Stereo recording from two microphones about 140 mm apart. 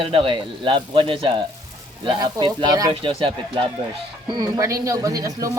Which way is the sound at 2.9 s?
40° right (ahead or behind).